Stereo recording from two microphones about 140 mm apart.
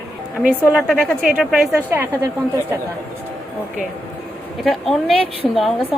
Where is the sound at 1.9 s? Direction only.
15° right (ahead or behind).